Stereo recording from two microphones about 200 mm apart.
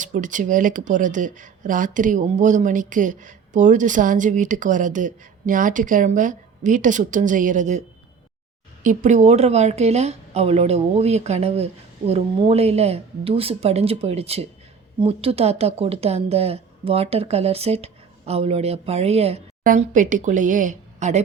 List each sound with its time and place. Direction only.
0.0 s speech: 40° right (ahead or behind)